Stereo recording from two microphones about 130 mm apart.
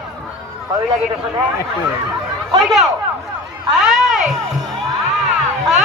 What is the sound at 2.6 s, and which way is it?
Speech, centre (ahead or behind).